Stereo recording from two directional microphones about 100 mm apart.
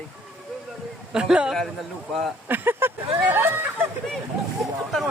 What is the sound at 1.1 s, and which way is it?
Speech, 10° right (ahead or behind).